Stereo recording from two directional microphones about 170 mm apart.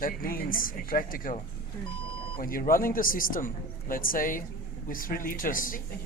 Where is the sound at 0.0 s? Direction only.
60° left (ahead or behind).